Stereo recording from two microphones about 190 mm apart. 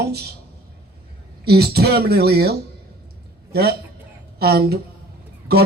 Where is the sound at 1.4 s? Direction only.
55° right (ahead or behind).